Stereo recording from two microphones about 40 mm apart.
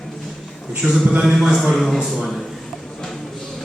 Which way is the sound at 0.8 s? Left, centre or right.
Right.